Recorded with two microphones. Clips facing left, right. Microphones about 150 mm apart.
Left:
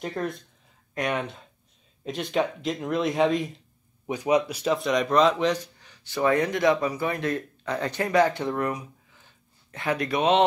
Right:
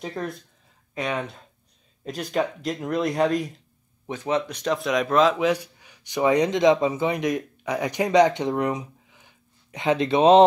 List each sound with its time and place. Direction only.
0.0 s speech: centre (ahead or behind)
0.9 s speech: 15° left (ahead or behind)
2.0 s speech: centre (ahead or behind)
4.1 s speech: 15° left (ahead or behind); by 10.4 s 30° right (ahead or behind)